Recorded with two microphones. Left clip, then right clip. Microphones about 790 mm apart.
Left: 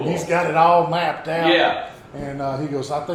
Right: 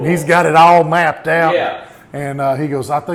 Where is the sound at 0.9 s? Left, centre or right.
Right.